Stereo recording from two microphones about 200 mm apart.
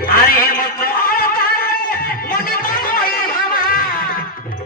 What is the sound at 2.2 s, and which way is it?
Music, 45° left (ahead or behind).